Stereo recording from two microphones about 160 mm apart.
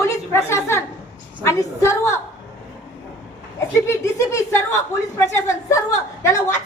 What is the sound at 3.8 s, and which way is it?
A woman's voice, 15° left (ahead or behind).